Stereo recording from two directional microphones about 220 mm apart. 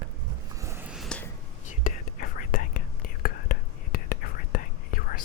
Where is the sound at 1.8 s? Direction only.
40° left (ahead or behind).